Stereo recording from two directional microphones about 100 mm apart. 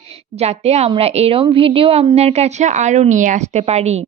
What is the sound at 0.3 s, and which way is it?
A woman's voice, 90° right.